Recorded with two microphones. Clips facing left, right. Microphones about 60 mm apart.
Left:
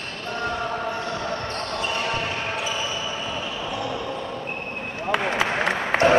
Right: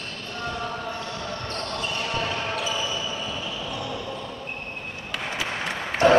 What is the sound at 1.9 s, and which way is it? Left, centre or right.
Basketball bounce, left.